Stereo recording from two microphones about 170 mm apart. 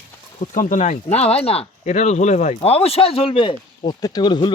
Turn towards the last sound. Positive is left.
turn(degrees=25)  # may be behind; listen again after turning